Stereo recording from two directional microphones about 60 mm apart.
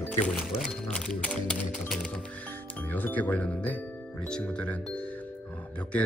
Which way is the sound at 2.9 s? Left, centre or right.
Left.